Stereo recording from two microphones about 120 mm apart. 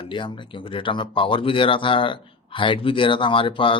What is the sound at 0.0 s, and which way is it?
Speech, 40° left (ahead or behind).